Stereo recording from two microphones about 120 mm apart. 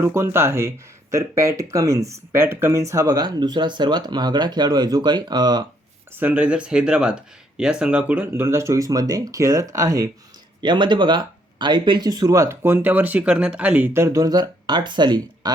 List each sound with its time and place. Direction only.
0.0 s speech: 20° right (ahead or behind)
6.1 s speech: 15° right (ahead or behind)
10.6 s speech: 40° right (ahead or behind)